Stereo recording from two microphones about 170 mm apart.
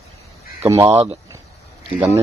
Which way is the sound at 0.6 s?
20° right (ahead or behind).